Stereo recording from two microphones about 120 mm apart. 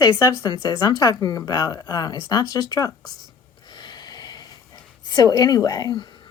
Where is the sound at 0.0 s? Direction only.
30° left (ahead or behind).